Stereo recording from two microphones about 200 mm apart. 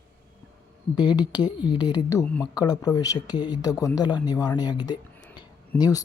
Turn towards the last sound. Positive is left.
turn(degrees=10)  # may be behind; listen again after turning